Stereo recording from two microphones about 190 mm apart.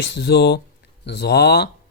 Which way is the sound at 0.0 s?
65° left (ahead or behind).